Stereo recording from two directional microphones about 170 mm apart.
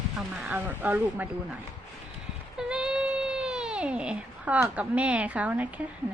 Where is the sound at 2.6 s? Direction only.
5° right (ahead or behind).